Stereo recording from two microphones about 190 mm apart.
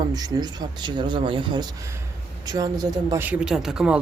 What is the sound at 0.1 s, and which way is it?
A man's voice, 20° right (ahead or behind).